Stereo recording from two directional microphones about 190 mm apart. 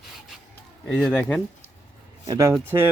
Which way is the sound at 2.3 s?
15° right (ahead or behind).